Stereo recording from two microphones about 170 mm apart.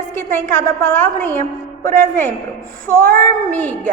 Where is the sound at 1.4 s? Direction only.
55° right (ahead or behind).